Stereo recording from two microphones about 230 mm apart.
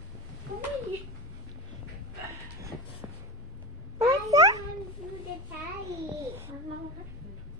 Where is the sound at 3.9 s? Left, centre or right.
Centre.